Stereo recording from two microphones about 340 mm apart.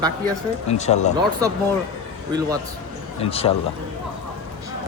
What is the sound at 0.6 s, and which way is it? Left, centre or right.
Speech, centre.